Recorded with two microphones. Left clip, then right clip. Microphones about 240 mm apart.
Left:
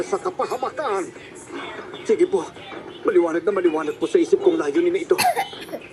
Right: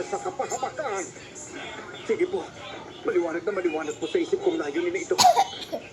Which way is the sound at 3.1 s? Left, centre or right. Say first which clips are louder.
Left 7 dB; left.